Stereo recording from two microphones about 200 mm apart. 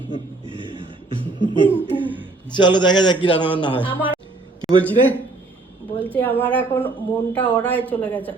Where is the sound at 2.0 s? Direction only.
10° right (ahead or behind).